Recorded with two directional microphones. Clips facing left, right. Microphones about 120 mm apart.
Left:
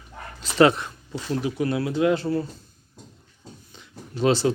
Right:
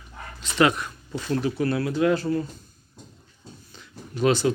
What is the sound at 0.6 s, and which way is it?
Speech, 30° left (ahead or behind).